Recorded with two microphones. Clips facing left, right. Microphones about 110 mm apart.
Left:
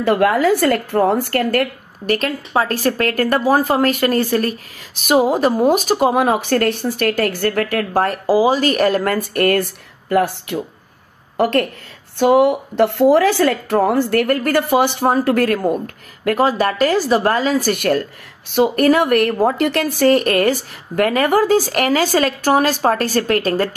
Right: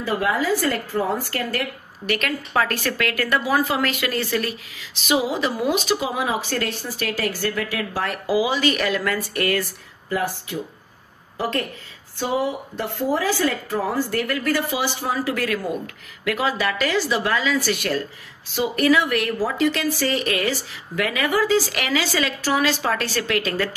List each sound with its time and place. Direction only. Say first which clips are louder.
0.0 s speech: left 8 dB; 65° left (ahead or behind)
2.0 s speech: left 5 dB; 35° left (ahead or behind)